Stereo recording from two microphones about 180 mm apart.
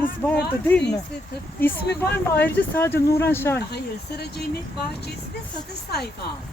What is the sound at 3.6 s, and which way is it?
Speech, 65° left (ahead or behind).